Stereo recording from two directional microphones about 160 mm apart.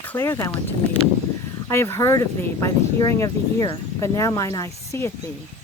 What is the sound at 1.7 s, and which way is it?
Speech, 15° left (ahead or behind).